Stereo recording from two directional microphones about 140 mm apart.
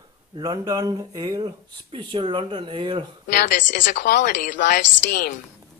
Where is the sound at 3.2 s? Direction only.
70° left (ahead or behind).